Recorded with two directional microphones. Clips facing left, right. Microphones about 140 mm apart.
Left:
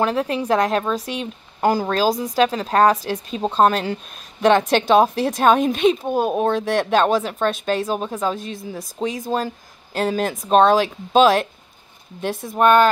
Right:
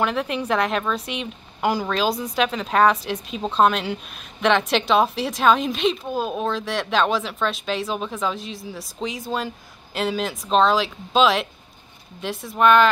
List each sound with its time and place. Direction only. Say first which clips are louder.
0.0 s a woman's voice: left 3 dB; 40° left (ahead or behind)